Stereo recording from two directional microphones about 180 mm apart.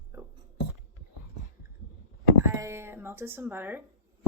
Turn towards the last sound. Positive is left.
turn(degrees=-10)  # may be behind; listen again after turning